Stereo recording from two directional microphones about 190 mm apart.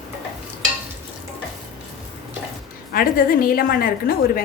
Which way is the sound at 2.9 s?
50° left (ahead or behind).